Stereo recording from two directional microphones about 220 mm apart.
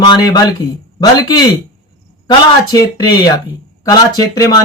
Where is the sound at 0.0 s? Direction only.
20° left (ahead or behind).